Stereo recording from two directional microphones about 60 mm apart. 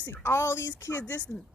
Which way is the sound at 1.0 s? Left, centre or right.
Left.